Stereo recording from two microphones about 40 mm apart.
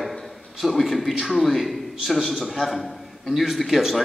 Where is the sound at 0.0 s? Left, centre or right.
Centre.